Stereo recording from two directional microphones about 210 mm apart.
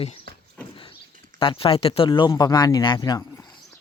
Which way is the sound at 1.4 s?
25° left (ahead or behind).